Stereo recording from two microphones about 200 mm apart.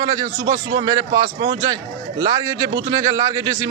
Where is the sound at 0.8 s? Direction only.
20° right (ahead or behind).